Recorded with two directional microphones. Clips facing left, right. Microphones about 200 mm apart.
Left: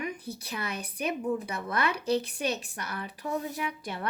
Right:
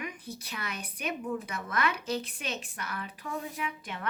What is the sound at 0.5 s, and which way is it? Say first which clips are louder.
Speech: left 5 dB; 30° left (ahead or behind).